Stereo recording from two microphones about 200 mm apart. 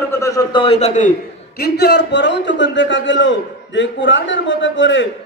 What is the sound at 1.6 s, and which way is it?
A man's voice, 55° left (ahead or behind).